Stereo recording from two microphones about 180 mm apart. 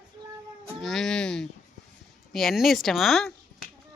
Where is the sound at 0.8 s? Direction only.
Centre (ahead or behind).